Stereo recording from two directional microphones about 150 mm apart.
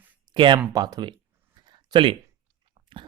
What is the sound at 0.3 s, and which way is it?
Speech, 35° right (ahead or behind).